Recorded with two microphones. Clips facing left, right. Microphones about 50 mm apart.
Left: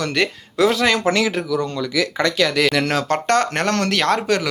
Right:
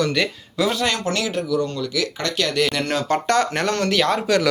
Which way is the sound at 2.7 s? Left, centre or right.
Left.